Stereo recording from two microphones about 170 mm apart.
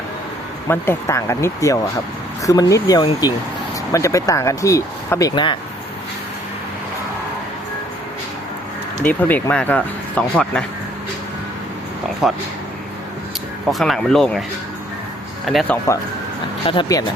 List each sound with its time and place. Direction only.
0.7 s speech: 15° left (ahead or behind)
5.3 s speech: 25° left (ahead or behind)
9.0 s speech: 10° left (ahead or behind)
12.2 s speech: centre (ahead or behind)
13.7 s speech: centre (ahead or behind)
15.4 s speech: 5° left (ahead or behind)
16.6 s speech: 30° left (ahead or behind)